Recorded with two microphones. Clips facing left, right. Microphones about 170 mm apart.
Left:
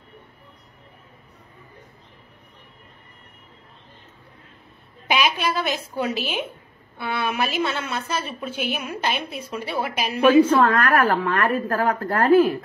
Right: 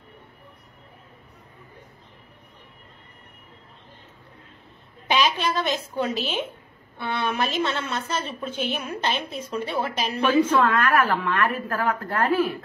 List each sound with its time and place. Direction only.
5.0 s a woman's voice: 10° left (ahead or behind)
10.4 s a woman's voice: 35° left (ahead or behind)